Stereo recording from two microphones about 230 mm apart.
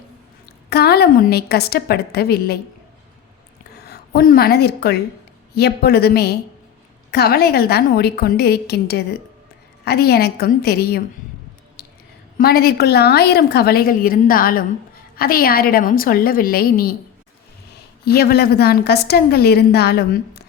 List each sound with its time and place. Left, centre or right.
0.7 s a woman's voice: left
3.8 s a woman's voice: left
11.8 s a sound: left
12.4 s a woman's voice: left
18.0 s a woman's voice: left